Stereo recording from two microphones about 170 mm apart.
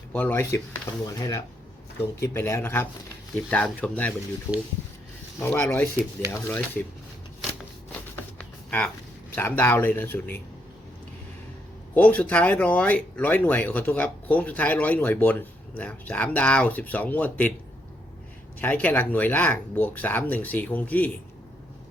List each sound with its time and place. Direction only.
0.1 s speech: 10° left (ahead or behind)
8.1 s music: 10° left (ahead or behind)
9.3 s speech: 10° left (ahead or behind)
11.9 s speech: 10° left (ahead or behind)
18.6 s speech: 10° left (ahead or behind)